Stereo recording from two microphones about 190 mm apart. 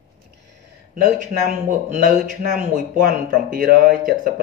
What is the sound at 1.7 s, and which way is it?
Speech, 45° right (ahead or behind).